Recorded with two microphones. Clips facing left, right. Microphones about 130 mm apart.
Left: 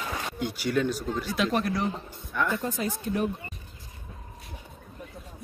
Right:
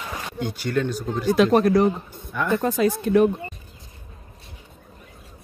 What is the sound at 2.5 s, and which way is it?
Speech, 70° right (ahead or behind).